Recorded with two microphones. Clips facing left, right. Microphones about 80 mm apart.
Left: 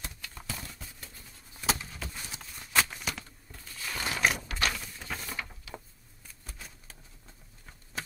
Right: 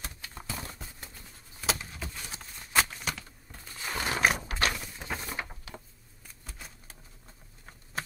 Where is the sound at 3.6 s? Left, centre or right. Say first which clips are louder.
Right 2 dB; right.